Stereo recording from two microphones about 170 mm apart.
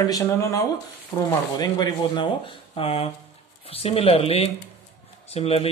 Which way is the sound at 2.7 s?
35° left (ahead or behind).